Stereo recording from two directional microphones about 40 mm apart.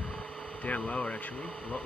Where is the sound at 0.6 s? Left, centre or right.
Left.